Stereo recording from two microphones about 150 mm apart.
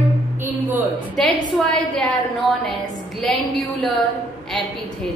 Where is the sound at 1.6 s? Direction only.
5° left (ahead or behind).